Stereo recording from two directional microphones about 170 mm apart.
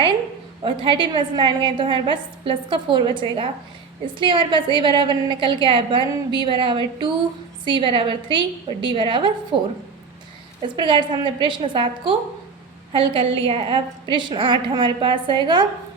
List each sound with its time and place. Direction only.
0.6 s a woman's voice: 30° right (ahead or behind)